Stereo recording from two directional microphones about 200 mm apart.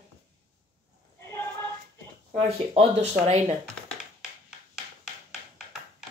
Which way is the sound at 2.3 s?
30° right (ahead or behind).